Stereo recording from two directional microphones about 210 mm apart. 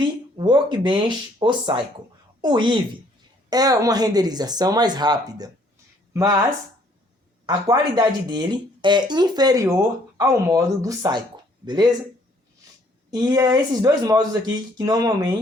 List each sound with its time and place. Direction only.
0.3 s speech: 20° right (ahead or behind)
7.4 s speech: 20° right (ahead or behind)
13.1 s speech: 20° right (ahead or behind)